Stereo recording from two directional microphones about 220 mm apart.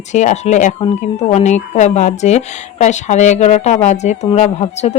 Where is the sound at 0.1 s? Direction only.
30° left (ahead or behind).